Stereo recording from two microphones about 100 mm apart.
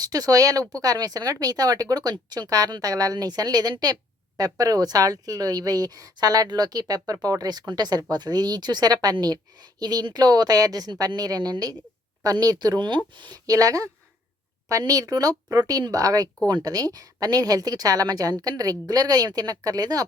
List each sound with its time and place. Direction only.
0.0 s speech: 40° right (ahead or behind)
13.5 s speech: 35° right (ahead or behind)